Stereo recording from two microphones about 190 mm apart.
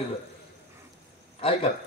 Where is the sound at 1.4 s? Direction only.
30° left (ahead or behind).